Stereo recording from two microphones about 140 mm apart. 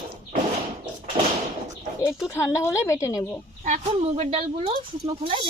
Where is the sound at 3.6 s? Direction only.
55° right (ahead or behind).